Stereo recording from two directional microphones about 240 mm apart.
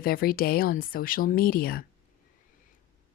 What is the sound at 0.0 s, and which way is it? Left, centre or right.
A woman's voice, left.